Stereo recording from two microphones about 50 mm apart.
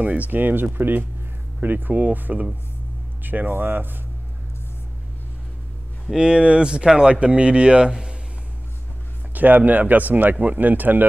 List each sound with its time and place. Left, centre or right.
0.0 s speech: right
0.3 s speech: right
6.1 s speech: centre
9.3 s speech: right